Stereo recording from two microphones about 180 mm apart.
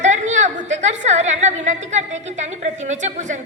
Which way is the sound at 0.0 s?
40° right (ahead or behind).